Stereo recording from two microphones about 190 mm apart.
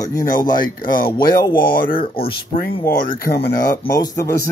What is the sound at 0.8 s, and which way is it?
Speech, 45° left (ahead or behind).